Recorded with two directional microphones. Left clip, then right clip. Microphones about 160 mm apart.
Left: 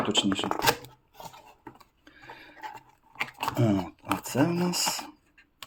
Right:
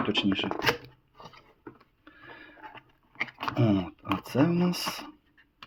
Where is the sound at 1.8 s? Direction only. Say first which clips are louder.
Left 1 dB; 5° left (ahead or behind).